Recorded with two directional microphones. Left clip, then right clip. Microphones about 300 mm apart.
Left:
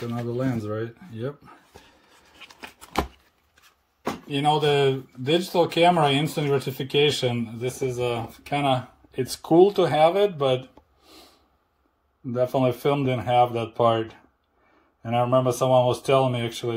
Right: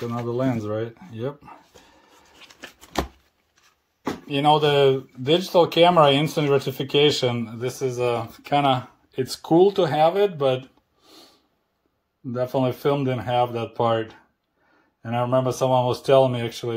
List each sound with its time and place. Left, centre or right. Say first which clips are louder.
0.2 s speech: right 3 dB; centre
4.3 s speech: right 3 dB; centre
12.3 s speech: left 1 dB; centre